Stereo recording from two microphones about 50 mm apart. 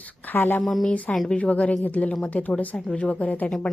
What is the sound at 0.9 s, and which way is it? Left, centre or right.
Speech, left.